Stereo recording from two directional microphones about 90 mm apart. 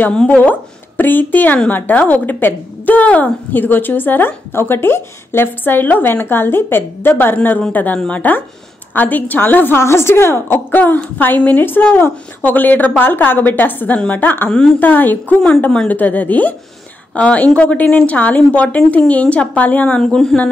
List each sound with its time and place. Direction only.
0.1 s speech: 10° left (ahead or behind)
0.4 s a woman's voice: 20° left (ahead or behind)
20.0 s speech: 5° left (ahead or behind)